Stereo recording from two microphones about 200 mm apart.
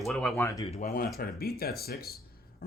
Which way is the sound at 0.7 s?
40° left (ahead or behind).